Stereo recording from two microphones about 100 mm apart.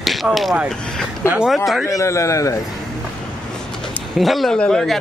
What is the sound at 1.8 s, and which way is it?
Speech, 30° left (ahead or behind).